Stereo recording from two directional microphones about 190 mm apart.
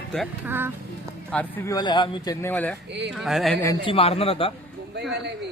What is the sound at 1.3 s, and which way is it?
Speech, 10° left (ahead or behind).